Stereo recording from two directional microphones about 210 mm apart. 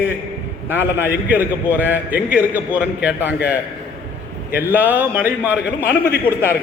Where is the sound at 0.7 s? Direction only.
10° right (ahead or behind).